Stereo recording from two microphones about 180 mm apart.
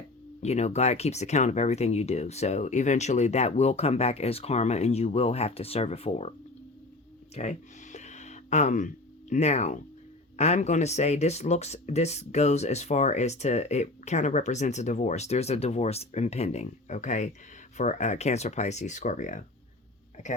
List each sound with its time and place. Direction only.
0.4 s speech: 35° left (ahead or behind)
7.3 s a sound: 40° left (ahead or behind)
9.3 s speech: 40° left (ahead or behind)